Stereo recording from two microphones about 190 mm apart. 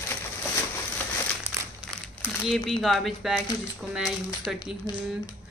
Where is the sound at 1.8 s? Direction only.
5° right (ahead or behind).